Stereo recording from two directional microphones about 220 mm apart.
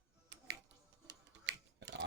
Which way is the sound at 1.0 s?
55° right (ahead or behind).